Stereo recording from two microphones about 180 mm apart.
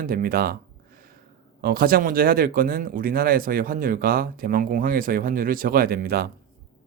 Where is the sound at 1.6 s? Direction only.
55° right (ahead or behind).